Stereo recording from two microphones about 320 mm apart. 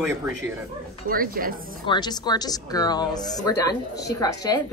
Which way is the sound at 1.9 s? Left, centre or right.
Centre.